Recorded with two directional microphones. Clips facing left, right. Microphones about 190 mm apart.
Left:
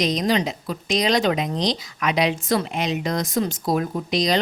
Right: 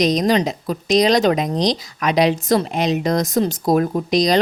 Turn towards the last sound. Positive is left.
turn(degrees=-40)  # may be behind; listen again after turning